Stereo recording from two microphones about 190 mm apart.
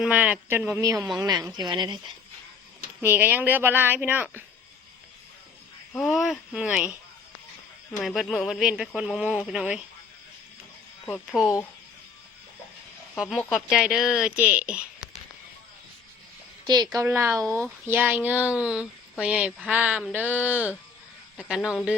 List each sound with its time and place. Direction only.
0.0 s a woman's voice: 5° right (ahead or behind); by 2.0 s 25° right (ahead or behind)
3.0 s a woman's voice: 10° right (ahead or behind)
5.9 s speech: centre (ahead or behind)
8.0 s speech: centre (ahead or behind)
11.0 s speech: 5° left (ahead or behind)
13.1 s speech: 5° right (ahead or behind)
16.6 s a woman's voice: 20° right (ahead or behind); by 21.8 s 5° right (ahead or behind)